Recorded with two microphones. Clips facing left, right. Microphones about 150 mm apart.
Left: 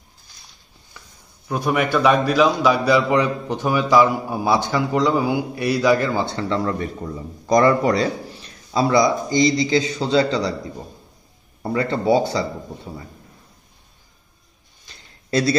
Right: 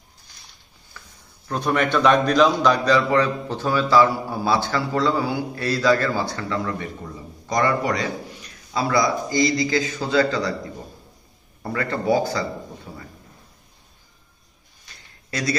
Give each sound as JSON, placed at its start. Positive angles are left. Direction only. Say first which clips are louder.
{"t": 1.0, "sound": "a sound", "louder": "even", "side_deg": 20}
{"t": 1.5, "sound": "a man's voice", "louder": "left 1 dB", "side_deg": 10}
{"t": 7.4, "sound": "a man's voice", "louder": "left 6 dB", "side_deg": 35}
{"t": 11.6, "sound": "a man's voice", "louder": "left 4 dB", "side_deg": 20}